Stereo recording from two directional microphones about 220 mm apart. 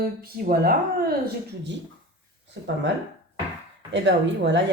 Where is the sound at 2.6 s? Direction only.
55° right (ahead or behind).